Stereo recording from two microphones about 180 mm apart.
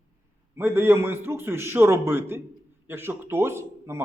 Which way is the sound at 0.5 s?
10° right (ahead or behind).